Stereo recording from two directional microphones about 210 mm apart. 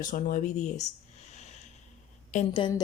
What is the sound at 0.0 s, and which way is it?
Speech, 40° left (ahead or behind).